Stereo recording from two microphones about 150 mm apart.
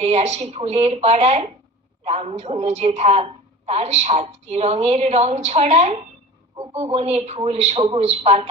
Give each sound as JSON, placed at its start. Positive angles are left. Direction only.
{"t": 0.0, "sound": "a woman's voice", "side_deg": -50}